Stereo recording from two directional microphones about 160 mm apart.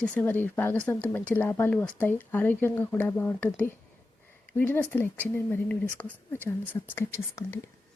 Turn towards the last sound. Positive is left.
turn(degrees=15)  # may be behind; listen again after turning